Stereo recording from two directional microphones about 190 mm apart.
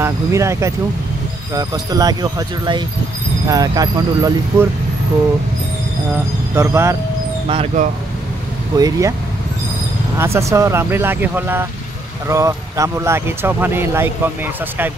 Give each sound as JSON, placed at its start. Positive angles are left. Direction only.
{"t": 0.0, "sound": "speech", "side_deg": -15}
{"t": 6.5, "sound": "speech", "side_deg": -15}
{"t": 7.4, "sound": "speech", "side_deg": -35}
{"t": 8.7, "sound": "speech", "side_deg": -20}
{"t": 10.1, "sound": "speech", "side_deg": -15}